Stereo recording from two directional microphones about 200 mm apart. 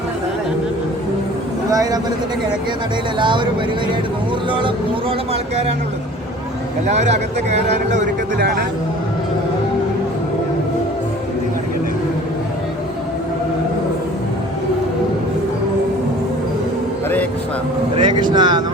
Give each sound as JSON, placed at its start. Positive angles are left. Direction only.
{"t": 1.7, "sound": "speech", "side_deg": -15}
{"t": 3.2, "sound": "speech", "side_deg": -25}
{"t": 6.8, "sound": "speech", "side_deg": -35}
{"t": 17.9, "sound": "speech", "side_deg": -20}